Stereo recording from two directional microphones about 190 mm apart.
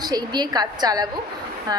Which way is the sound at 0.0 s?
20° right (ahead or behind).